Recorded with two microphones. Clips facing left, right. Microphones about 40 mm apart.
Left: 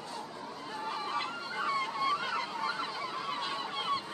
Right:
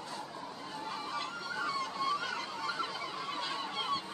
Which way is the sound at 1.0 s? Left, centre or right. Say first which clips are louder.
Left 3 dB; left.